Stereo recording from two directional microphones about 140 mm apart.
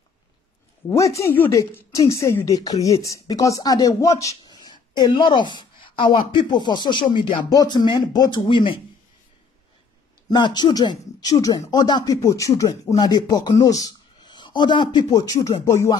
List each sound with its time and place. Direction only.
0.8 s speech: 20° left (ahead or behind)
10.3 s speech: 30° left (ahead or behind)